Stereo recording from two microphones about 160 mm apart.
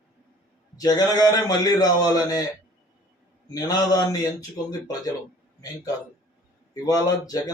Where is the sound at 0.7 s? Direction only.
25° left (ahead or behind).